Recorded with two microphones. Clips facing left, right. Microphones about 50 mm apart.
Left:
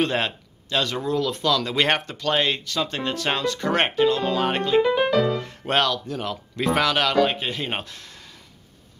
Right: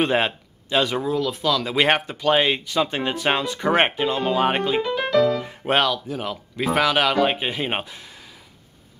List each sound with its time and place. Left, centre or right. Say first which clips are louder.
0.0 s speech: right 3 dB; centre
4.8 s music: even; centre
5.4 s speech: right 2 dB; centre